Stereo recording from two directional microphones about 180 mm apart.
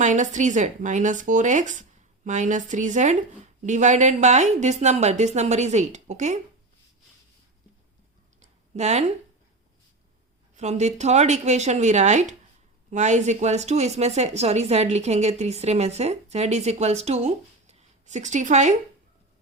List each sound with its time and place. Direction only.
0.0 s a woman's voice: 45° right (ahead or behind)
8.7 s speech: 40° right (ahead or behind)
10.5 s a woman's voice: 40° right (ahead or behind)